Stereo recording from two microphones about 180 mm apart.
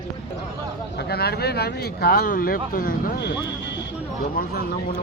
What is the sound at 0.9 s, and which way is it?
Speech, 65° left (ahead or behind).